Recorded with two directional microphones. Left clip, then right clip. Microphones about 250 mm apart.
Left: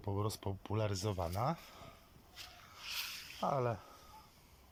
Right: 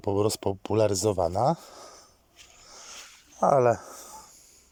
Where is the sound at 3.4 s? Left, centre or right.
Right.